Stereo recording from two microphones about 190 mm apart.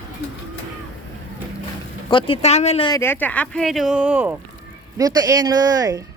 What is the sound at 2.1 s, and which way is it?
Speech, 25° left (ahead or behind).